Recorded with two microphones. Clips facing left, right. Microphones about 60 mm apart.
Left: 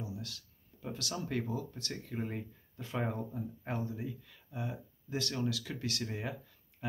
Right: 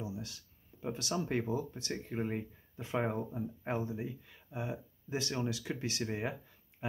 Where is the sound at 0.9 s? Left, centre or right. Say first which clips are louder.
Right 2 dB; right.